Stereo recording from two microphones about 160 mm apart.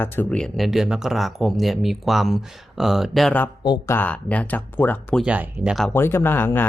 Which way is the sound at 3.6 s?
25° left (ahead or behind).